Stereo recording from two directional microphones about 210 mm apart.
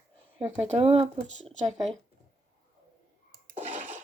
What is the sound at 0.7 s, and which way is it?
Speech, 30° right (ahead or behind).